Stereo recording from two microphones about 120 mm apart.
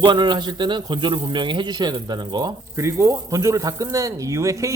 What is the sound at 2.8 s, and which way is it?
Speech, 25° right (ahead or behind).